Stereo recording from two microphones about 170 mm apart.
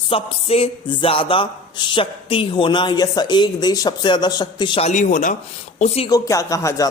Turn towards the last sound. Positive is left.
turn(degrees=20)  # may be behind; listen again after turning